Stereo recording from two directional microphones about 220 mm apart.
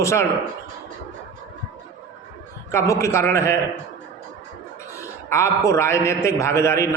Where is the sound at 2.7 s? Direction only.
15° left (ahead or behind).